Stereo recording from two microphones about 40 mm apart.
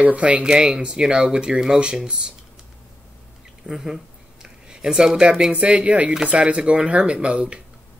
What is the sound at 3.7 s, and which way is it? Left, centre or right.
Speech, centre.